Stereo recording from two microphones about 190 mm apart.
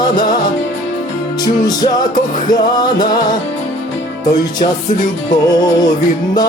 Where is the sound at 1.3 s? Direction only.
20° left (ahead or behind).